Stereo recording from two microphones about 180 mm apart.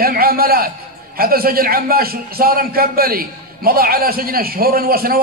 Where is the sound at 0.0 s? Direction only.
55° right (ahead or behind).